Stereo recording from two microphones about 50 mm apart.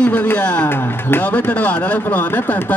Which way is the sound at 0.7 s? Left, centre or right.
Left.